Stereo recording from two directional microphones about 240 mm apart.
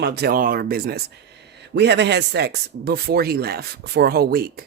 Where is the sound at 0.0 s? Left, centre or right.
Right.